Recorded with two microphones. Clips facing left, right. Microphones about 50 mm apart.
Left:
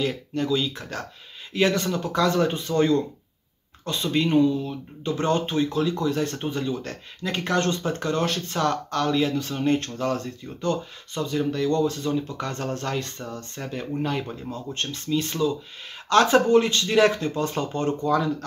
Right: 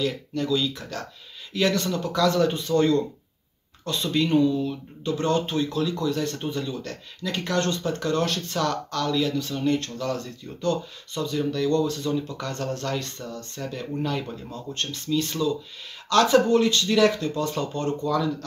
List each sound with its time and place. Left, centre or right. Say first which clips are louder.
0.0 s a man's voice: left 1 dB; left
10.6 s speech: even; centre